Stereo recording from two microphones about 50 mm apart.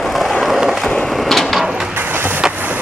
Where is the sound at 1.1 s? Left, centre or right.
Centre.